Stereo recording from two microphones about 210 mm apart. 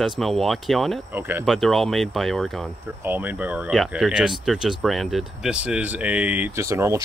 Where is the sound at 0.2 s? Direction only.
Centre (ahead or behind).